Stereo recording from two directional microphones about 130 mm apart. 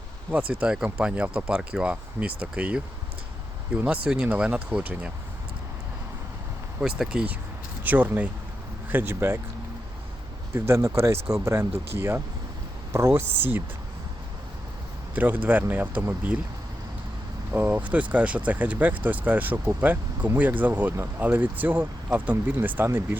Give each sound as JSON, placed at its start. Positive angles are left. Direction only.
{"t": 0.3, "sound": "speech", "side_deg": -10}
{"t": 7.0, "sound": "speech", "side_deg": -5}
{"t": 10.5, "sound": "speech", "side_deg": -20}
{"t": 15.1, "sound": "speech", "side_deg": -15}
{"t": 17.5, "sound": "speech", "side_deg": -15}